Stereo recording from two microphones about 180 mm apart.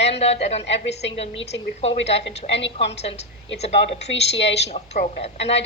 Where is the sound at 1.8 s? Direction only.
35° left (ahead or behind).